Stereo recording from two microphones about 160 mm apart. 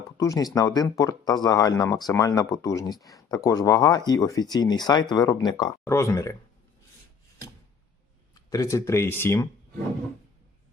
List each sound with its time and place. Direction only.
0.2 s speech: 20° left (ahead or behind)
5.8 s speech: 15° left (ahead or behind)
8.4 s speech: 20° left (ahead or behind)